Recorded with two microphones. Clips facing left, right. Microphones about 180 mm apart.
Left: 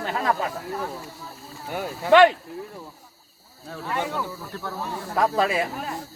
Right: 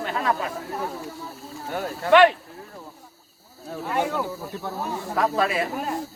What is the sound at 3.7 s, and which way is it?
Speech, 10° right (ahead or behind).